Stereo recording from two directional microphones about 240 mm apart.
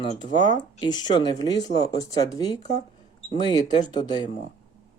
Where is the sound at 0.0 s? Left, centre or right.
Left.